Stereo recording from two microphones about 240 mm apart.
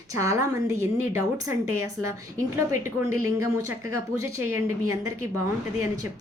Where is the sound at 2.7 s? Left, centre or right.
Centre.